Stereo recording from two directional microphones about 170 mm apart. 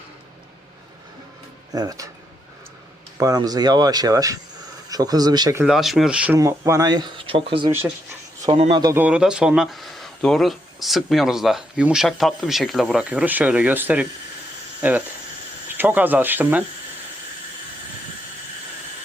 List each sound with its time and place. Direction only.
1.7 s speech: 20° right (ahead or behind)
3.2 s speech: 20° right (ahead or behind)
5.6 s speech: centre (ahead or behind); by 8.8 s 30° right (ahead or behind)
8.8 s speech: 15° right (ahead or behind)